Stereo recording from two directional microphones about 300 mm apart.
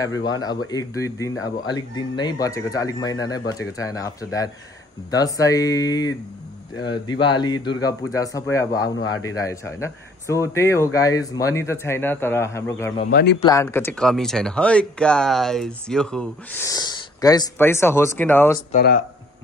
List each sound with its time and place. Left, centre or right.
0.0 s speech: centre
13.0 s speech: left
13.4 s speech: centre
18.7 s speech: left